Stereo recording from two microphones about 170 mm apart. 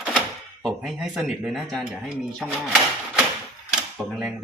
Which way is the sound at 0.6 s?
Centre (ahead or behind).